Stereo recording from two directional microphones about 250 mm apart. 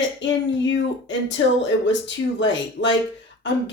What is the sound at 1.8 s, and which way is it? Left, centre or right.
Speech, left.